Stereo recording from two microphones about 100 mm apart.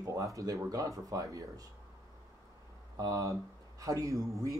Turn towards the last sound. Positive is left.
turn(degrees=-35)  # may be behind; listen again after turning